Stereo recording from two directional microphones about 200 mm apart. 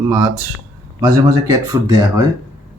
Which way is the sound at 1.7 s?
15° right (ahead or behind).